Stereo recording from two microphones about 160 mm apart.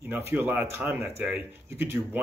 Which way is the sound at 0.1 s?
10° right (ahead or behind).